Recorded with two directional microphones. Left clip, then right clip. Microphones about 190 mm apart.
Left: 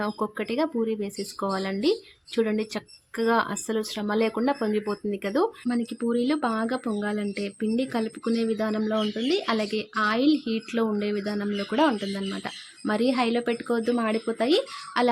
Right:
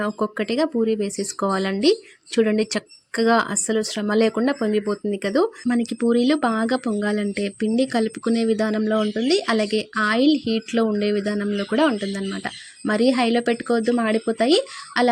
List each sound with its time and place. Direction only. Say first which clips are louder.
0.0 s speech: right 5 dB; 20° right (ahead or behind)